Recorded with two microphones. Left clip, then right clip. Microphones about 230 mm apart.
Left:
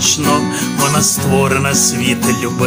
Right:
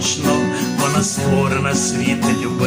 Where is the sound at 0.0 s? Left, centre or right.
Left.